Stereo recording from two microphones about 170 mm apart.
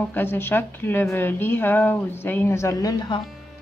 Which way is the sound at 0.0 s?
10° left (ahead or behind).